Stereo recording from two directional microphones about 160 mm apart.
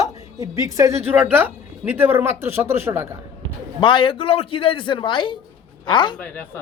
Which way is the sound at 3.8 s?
30° left (ahead or behind).